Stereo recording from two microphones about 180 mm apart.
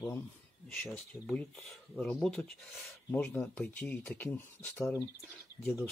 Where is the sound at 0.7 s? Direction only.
5° left (ahead or behind).